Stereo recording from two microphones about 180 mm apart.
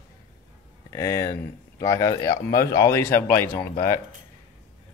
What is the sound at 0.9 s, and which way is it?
Speech, 20° left (ahead or behind).